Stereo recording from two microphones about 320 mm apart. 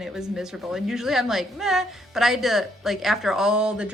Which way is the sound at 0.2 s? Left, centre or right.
Centre.